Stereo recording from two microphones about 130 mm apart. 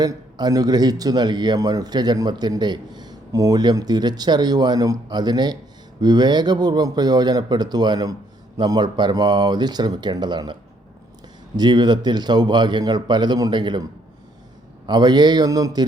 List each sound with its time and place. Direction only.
0.0 s speech: 30° right (ahead or behind)
14.8 s speech: 35° right (ahead or behind)